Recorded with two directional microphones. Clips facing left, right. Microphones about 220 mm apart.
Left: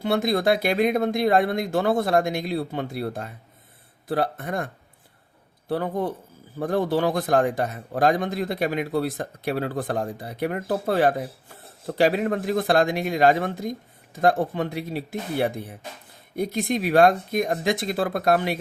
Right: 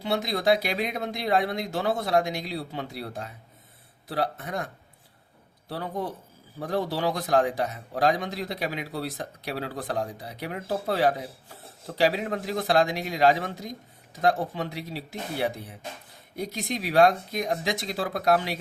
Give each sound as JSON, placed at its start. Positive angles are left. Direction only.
{"t": 0.0, "sound": "a man's voice", "side_deg": 50}